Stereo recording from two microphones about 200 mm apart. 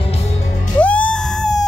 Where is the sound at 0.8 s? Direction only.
5° left (ahead or behind).